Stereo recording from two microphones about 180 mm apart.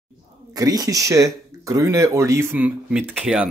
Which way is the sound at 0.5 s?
20° right (ahead or behind).